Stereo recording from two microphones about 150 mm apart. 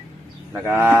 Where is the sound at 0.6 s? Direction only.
15° right (ahead or behind).